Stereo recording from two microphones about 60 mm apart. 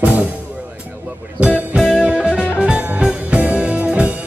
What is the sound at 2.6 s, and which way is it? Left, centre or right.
Music, right.